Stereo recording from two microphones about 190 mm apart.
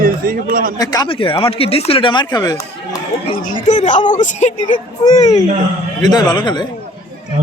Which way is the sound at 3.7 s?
40° left (ahead or behind).